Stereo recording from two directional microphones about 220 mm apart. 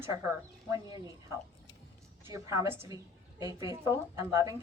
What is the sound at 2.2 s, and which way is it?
A woman's voice, 15° right (ahead or behind).